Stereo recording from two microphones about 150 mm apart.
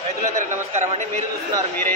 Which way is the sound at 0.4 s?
50° right (ahead or behind).